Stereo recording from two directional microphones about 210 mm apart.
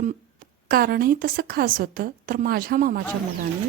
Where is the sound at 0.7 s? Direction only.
45° right (ahead or behind).